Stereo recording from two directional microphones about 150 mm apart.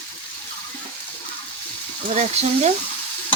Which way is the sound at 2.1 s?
45° right (ahead or behind).